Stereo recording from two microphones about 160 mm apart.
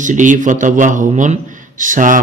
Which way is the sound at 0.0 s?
50° right (ahead or behind).